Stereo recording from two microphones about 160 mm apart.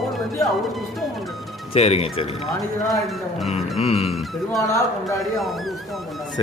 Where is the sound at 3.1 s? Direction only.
Centre (ahead or behind).